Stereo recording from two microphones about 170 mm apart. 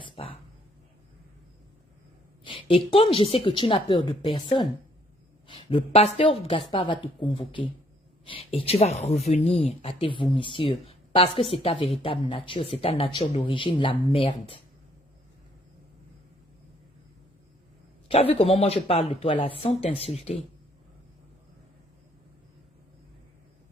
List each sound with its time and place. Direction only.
0.0 s a sound: 30° left (ahead or behind)
2.4 s a woman's voice: 30° left (ahead or behind)
18.1 s speech: 35° left (ahead or behind)